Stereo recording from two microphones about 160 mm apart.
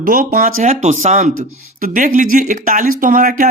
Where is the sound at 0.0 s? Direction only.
55° right (ahead or behind).